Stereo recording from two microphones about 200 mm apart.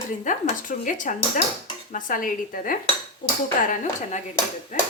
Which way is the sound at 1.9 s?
40° left (ahead or behind).